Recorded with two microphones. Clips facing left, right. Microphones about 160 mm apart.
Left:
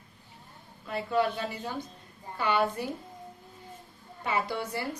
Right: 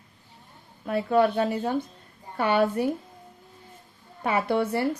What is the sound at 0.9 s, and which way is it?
A woman's voice, 55° right (ahead or behind).